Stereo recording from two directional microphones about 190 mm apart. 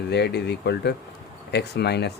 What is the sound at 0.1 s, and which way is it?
Speech, 60° left (ahead or behind).